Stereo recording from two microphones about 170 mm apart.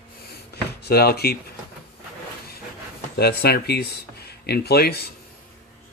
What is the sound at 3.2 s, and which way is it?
Speech, 70° left (ahead or behind).